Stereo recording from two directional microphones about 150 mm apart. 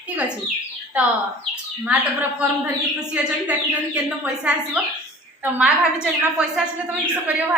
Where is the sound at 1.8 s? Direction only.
10° right (ahead or behind).